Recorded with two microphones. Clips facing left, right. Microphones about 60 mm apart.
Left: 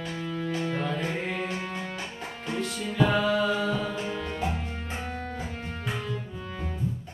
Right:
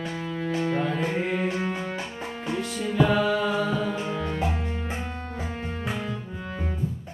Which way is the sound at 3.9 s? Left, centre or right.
Centre.